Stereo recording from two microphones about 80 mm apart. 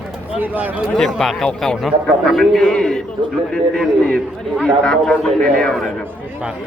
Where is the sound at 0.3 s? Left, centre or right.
Right.